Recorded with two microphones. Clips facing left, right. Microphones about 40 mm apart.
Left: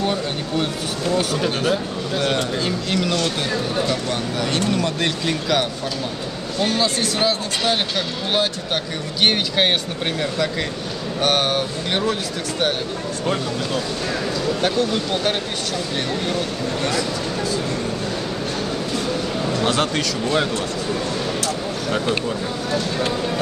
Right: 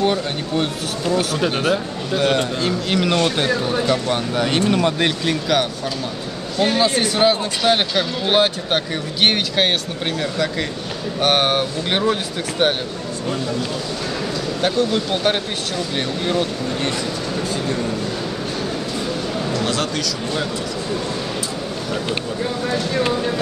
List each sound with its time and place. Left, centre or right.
0.0 s speech: centre
3.0 s speech: right
3.8 s speech: centre
6.6 s speech: centre
11.1 s speech: centre
14.6 s speech: centre
16.3 s speech: right
19.5 s speech: left
22.7 s speech: right